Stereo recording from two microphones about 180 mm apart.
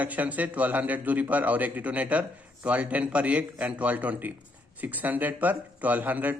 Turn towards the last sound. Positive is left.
turn(degrees=-10)  # may be behind; listen again after turning